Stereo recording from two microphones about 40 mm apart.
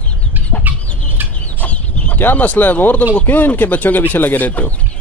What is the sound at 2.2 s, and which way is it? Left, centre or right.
Speech, left.